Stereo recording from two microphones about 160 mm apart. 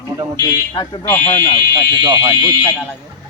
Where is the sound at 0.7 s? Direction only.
30° left (ahead or behind).